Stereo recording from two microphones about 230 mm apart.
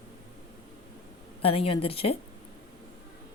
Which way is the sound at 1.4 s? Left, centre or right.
Left.